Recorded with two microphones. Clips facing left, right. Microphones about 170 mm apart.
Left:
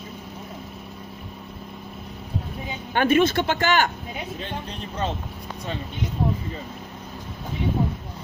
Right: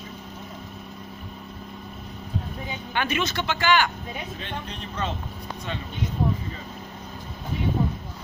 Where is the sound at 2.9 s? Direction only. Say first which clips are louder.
Left 8 dB; 50° left (ahead or behind).